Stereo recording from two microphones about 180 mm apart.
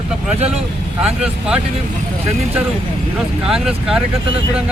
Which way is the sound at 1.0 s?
5° right (ahead or behind).